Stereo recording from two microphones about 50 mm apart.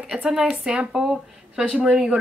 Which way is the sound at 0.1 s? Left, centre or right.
Centre.